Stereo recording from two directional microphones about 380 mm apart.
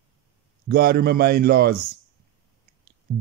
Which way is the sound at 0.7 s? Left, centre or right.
Right.